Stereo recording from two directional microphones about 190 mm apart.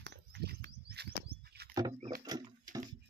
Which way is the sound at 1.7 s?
20° right (ahead or behind).